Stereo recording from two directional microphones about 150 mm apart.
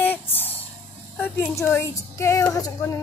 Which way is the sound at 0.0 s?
15° left (ahead or behind).